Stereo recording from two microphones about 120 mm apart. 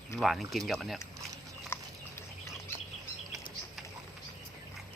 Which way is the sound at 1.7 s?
20° left (ahead or behind).